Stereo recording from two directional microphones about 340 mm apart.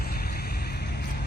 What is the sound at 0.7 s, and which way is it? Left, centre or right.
Vehicle, left.